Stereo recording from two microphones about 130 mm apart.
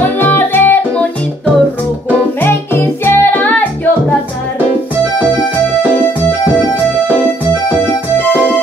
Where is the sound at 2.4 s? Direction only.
15° left (ahead or behind).